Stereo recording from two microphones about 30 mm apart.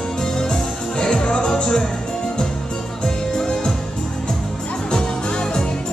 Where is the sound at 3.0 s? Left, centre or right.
Left.